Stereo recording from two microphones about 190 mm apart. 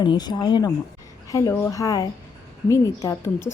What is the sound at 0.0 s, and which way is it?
A woman's voice, 25° left (ahead or behind).